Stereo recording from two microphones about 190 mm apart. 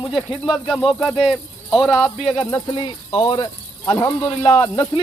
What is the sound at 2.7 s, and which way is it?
Speech, 25° left (ahead or behind).